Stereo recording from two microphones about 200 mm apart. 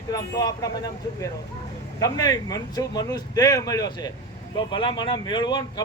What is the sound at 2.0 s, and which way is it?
Speech, 20° left (ahead or behind).